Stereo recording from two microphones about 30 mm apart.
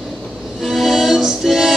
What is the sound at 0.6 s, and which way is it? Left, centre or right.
Music, centre.